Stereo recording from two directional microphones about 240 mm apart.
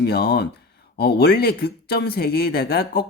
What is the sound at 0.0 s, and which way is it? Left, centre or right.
Speech, left.